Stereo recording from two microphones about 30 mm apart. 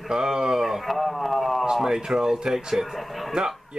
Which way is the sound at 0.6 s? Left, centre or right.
Centre.